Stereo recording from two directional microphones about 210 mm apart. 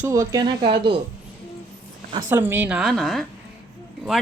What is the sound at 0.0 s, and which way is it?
Speech, 15° right (ahead or behind).